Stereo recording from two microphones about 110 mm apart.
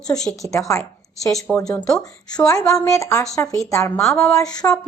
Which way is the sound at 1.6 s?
5° left (ahead or behind).